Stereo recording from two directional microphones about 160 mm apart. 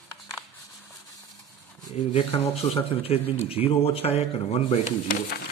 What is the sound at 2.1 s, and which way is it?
Speech, 40° left (ahead or behind).